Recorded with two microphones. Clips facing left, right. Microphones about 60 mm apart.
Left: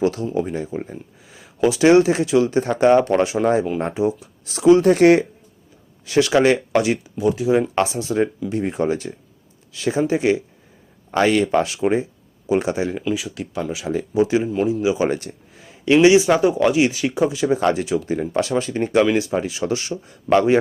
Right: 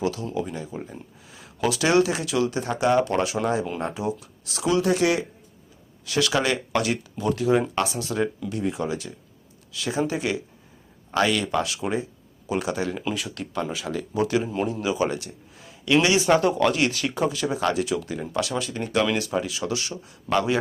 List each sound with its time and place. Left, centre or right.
0.0 s speech: left
3.1 s speech: left
6.1 s speech: left
7.2 s speech: centre
7.8 s speech: left
13.1 s speech: centre
13.8 s speech: left
14.4 s speech: centre
14.9 s speech: left
16.3 s speech: centre
17.5 s speech: left